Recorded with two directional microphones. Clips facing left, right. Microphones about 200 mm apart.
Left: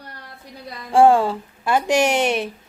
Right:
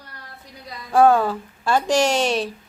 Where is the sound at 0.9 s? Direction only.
25° left (ahead or behind).